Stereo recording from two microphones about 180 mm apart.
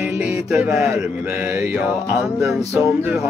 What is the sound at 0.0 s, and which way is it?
Music, 5° right (ahead or behind).